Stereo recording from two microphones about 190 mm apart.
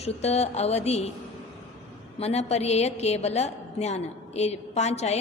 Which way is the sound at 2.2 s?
35° left (ahead or behind).